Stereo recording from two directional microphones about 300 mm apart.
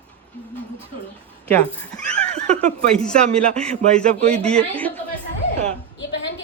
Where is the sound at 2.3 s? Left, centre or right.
Right.